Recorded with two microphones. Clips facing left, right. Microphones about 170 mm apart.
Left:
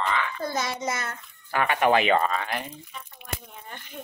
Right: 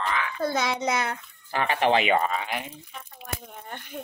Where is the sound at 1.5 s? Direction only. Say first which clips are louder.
Left 1 dB; 30° right (ahead or behind); by 2.8 s 5° right (ahead or behind).